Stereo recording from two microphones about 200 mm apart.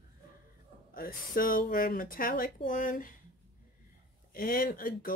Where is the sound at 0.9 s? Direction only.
45° left (ahead or behind).